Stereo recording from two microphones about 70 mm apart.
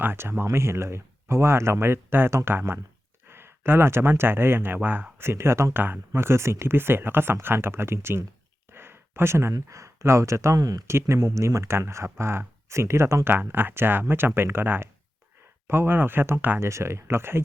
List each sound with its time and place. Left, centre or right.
0.0 s speech: right
10.6 s speech: right
10.8 s speech: right
13.3 s speech: right
16.6 s speech: right